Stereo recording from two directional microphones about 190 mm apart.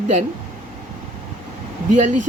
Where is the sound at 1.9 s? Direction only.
40° right (ahead or behind).